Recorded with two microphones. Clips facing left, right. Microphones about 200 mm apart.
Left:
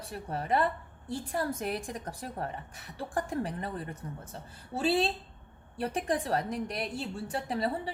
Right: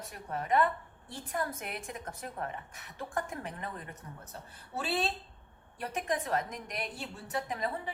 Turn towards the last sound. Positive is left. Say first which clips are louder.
# left 4 dB
turn(degrees=35)  # may be behind; listen again after turning